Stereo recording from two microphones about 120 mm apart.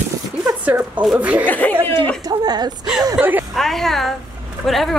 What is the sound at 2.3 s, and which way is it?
Speech, 35° right (ahead or behind).